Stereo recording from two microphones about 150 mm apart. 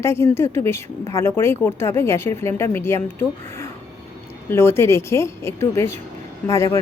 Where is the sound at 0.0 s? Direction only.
20° left (ahead or behind).